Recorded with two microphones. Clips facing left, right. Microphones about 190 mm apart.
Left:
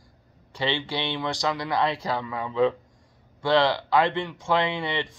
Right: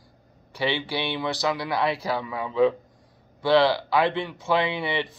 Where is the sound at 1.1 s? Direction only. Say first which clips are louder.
Right 1 dB; 5° right (ahead or behind).